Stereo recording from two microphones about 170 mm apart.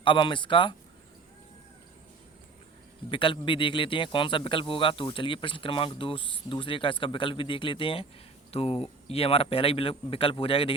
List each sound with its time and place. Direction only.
0.0 s speech: 30° left (ahead or behind)
3.1 s speech: 30° left (ahead or behind)